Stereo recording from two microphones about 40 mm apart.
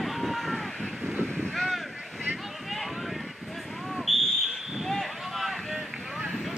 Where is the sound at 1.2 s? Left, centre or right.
Centre.